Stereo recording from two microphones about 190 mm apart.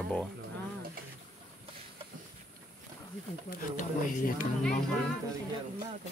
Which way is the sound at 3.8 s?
45° left (ahead or behind).